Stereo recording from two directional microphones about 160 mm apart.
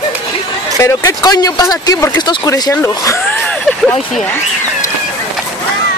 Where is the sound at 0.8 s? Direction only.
20° left (ahead or behind).